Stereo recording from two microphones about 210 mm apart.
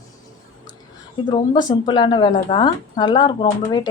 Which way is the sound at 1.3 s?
20° left (ahead or behind).